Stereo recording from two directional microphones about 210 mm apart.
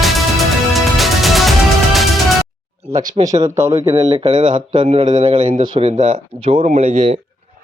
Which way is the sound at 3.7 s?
25° right (ahead or behind).